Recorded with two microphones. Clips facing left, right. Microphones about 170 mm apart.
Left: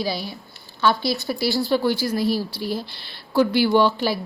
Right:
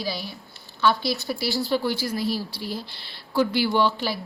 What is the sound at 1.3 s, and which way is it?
Speech, 50° left (ahead or behind).